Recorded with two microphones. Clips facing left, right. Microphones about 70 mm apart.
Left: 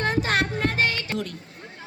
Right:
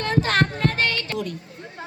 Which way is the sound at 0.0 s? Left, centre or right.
Left.